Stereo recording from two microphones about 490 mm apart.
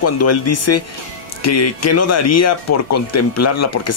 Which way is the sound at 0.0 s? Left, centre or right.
Left.